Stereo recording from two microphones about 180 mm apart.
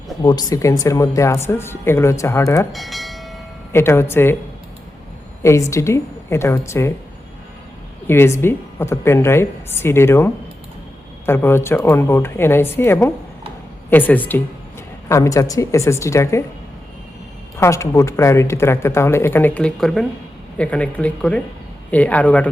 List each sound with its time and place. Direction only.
0.2 s speech: 20° left (ahead or behind)
2.7 s train: centre (ahead or behind)
3.7 s speech: 15° left (ahead or behind)
5.4 s speech: 15° left (ahead or behind)
8.0 s speech: 15° left (ahead or behind)
17.6 s speech: 15° left (ahead or behind)